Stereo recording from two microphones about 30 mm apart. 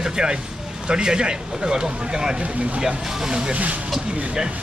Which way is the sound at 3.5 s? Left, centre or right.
Right.